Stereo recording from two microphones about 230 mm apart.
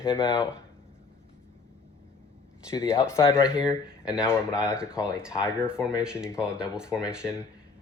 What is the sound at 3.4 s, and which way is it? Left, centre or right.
Speech, centre.